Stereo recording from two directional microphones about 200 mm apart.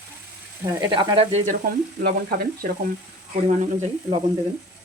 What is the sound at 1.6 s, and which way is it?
Speech, 45° right (ahead or behind).